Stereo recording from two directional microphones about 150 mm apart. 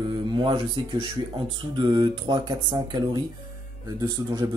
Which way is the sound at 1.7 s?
30° right (ahead or behind).